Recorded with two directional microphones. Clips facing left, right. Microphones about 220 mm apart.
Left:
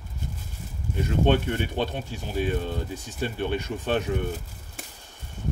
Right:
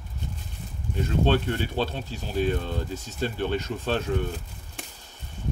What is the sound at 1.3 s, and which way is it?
Speech, 15° left (ahead or behind).